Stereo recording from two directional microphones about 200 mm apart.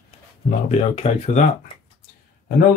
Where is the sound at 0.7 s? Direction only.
30° left (ahead or behind).